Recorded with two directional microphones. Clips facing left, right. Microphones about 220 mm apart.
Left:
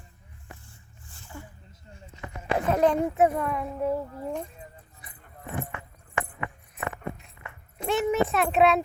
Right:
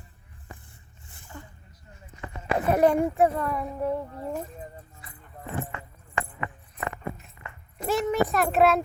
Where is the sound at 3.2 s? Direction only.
5° left (ahead or behind).